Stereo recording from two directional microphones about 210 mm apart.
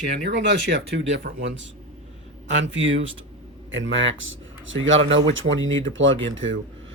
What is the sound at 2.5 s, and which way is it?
Speech, 60° right (ahead or behind).